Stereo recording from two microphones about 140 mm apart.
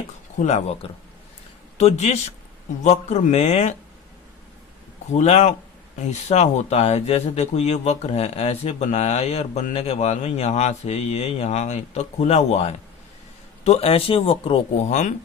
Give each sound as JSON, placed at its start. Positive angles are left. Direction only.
{"t": 0.3, "sound": "a man's voice", "side_deg": 50}
{"t": 5.1, "sound": "speech", "side_deg": 50}